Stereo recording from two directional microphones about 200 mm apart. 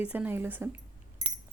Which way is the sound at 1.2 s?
35° right (ahead or behind).